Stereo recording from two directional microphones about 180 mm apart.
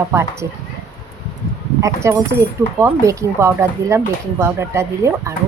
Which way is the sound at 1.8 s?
15° right (ahead or behind).